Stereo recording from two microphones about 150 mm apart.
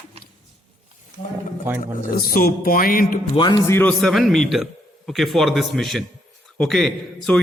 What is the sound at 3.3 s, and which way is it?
Speech, 30° left (ahead or behind).